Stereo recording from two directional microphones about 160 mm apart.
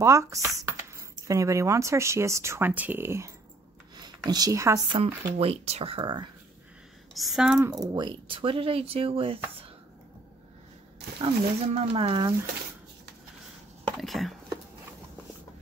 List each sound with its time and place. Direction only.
0.0 s a sound: 20° right (ahead or behind)
1.2 s speech: 20° right (ahead or behind)
4.3 s a woman's voice: 20° right (ahead or behind)
4.9 s speech: 35° right (ahead or behind)
7.2 s speech: centre (ahead or behind)
7.9 s speech: 30° right (ahead or behind)
11.1 s speech: 30° right (ahead or behind)
13.9 s a sound: centre (ahead or behind)